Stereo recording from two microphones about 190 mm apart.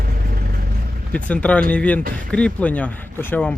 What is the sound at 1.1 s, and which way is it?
Speech, 5° left (ahead or behind).